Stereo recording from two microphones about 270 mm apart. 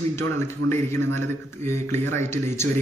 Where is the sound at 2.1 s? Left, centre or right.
Centre.